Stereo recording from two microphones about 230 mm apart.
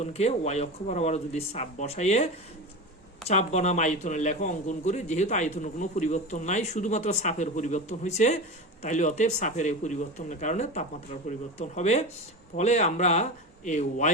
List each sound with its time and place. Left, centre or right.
0.0 s speech: left